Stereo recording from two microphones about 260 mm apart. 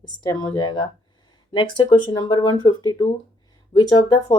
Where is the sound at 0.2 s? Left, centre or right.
Centre.